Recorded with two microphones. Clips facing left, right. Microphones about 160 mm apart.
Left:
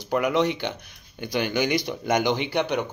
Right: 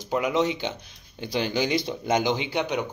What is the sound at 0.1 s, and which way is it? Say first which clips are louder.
Speech: left 2 dB; 65° left (ahead or behind).